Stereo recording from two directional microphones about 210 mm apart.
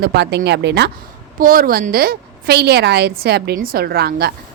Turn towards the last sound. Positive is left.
turn(degrees=-50)  # may be behind; listen again after turning